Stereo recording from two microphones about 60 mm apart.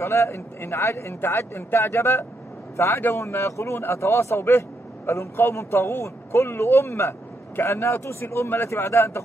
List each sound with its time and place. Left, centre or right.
0.0 s a man's voice: left